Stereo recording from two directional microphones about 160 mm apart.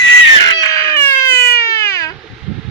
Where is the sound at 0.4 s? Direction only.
20° left (ahead or behind).